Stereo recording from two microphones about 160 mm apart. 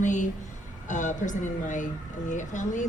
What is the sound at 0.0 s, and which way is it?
Speech, 50° left (ahead or behind).